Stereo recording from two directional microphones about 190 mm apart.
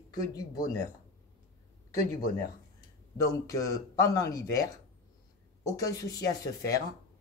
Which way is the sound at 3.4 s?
15° left (ahead or behind).